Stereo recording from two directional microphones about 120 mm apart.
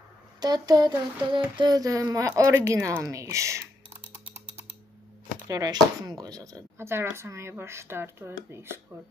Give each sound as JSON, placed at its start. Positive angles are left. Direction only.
{"t": 0.4, "sound": "child singing", "side_deg": -35}
{"t": 5.5, "sound": "child singing", "side_deg": -35}